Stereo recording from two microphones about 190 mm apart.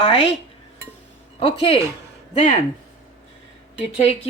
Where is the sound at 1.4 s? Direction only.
30° left (ahead or behind).